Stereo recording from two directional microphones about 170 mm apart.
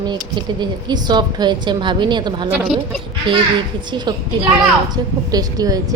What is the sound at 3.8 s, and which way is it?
A woman's voice, 25° right (ahead or behind).